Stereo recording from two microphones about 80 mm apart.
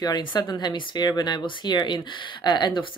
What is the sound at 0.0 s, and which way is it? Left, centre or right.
Speech, left.